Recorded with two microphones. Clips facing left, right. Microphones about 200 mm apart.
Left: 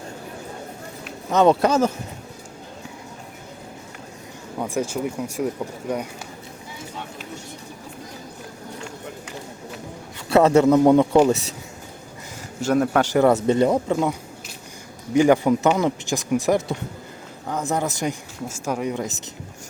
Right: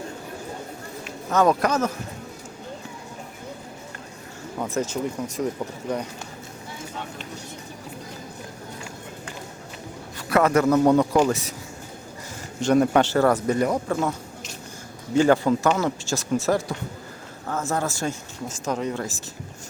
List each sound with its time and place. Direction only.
1.3 s speech: 25° left (ahead or behind)
4.6 s speech: 10° left (ahead or behind)
10.2 s a man's voice: 25° left (ahead or behind)
12.6 s a man's voice: centre (ahead or behind)
13.0 s speech: 15° left (ahead or behind)